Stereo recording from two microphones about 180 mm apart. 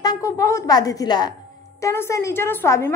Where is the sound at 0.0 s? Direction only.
20° left (ahead or behind).